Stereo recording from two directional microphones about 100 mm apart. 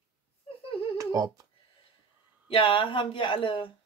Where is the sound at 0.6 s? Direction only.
65° left (ahead or behind).